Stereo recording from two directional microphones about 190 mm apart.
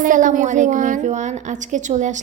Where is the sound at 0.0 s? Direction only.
45° right (ahead or behind).